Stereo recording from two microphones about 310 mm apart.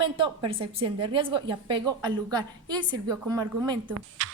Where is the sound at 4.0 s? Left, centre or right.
Right.